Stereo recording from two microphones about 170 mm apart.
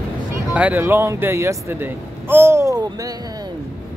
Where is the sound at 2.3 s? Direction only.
15° right (ahead or behind).